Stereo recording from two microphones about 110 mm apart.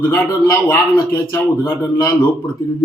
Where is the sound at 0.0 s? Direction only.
20° left (ahead or behind).